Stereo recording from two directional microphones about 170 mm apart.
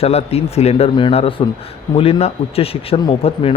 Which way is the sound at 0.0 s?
35° left (ahead or behind).